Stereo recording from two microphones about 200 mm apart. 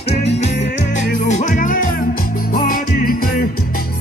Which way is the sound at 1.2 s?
35° left (ahead or behind).